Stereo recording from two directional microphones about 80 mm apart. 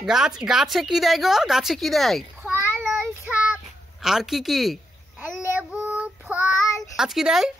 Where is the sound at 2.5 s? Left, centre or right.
Right.